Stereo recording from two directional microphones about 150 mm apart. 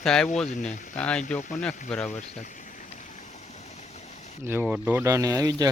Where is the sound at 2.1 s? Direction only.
55° left (ahead or behind).